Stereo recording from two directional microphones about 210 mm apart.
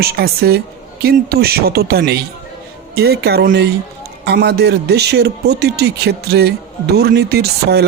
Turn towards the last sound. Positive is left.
turn(degrees=-50)  # may be behind; listen again after turning